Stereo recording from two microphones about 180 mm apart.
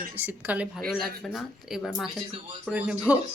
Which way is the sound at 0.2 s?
10° right (ahead or behind).